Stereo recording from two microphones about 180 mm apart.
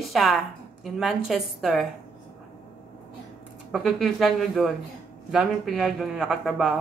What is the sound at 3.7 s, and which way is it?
A man's voice, centre (ahead or behind).